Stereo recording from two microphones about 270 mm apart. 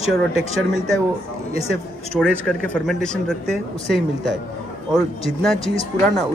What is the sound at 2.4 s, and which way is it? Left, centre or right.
Speech, centre.